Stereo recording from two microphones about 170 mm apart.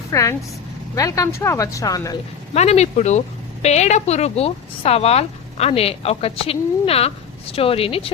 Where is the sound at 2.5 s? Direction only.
40° left (ahead or behind).